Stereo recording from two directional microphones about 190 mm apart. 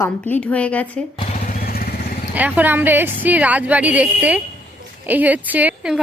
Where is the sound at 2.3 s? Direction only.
10° right (ahead or behind).